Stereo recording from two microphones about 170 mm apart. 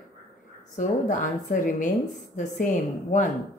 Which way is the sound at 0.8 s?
50° left (ahead or behind).